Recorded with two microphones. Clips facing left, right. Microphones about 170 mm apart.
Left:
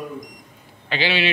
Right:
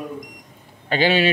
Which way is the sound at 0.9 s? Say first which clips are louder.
Right 5 dB; 45° right (ahead or behind).